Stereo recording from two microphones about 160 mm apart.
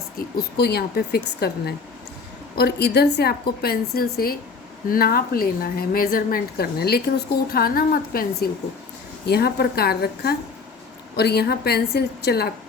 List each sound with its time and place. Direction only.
0.2 s a woman's voice: 80° left; by 8.4 s 65° left (ahead or behind)
9.2 s a woman's voice: 85° left
11.2 s a woman's voice: 90° left